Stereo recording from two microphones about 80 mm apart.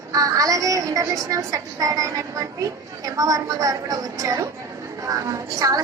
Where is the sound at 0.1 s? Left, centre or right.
Right.